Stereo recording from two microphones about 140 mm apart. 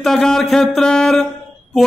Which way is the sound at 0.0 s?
5° left (ahead or behind).